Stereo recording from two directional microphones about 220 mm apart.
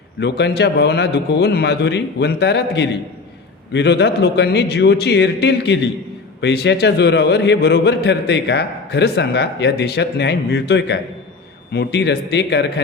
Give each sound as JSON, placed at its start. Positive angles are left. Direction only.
{"t": 0.2, "sound": "a man's voice", "side_deg": 50}